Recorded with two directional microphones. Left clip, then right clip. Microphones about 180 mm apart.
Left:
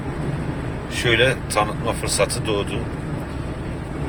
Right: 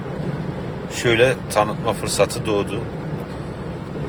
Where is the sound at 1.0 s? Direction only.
30° right (ahead or behind).